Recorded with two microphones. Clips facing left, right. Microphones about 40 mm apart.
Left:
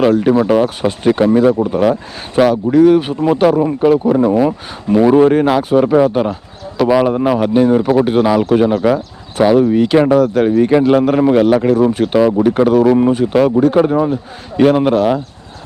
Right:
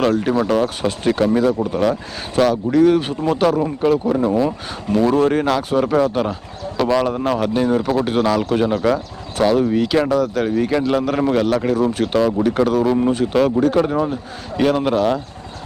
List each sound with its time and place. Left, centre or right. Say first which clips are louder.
0.0 s speech: left 6 dB; centre
5.3 s speech: left 6 dB; centre
9.9 s speech: left 6 dB; left
11.1 s speech: left 6 dB; centre